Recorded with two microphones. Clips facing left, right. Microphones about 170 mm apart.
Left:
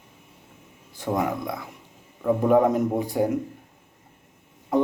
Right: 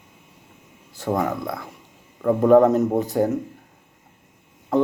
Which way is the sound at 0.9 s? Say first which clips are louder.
Right 2 dB; 15° left (ahead or behind).